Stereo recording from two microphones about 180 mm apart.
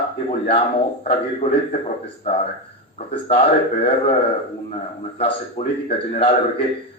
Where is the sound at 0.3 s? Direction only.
35° left (ahead or behind).